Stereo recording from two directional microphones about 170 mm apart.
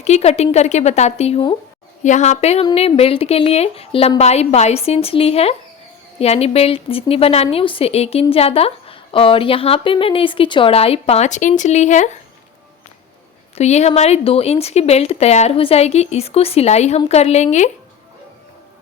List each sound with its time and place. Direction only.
0.0 s a woman's voice: 40° left (ahead or behind)
2.0 s a woman's voice: 45° left (ahead or behind)
13.6 s a woman's voice: 40° left (ahead or behind)